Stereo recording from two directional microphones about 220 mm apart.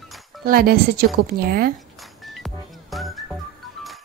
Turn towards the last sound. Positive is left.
turn(degrees=0)  # may be behind; listen again after turning